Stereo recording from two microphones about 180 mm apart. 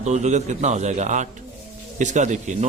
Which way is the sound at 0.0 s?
40° right (ahead or behind).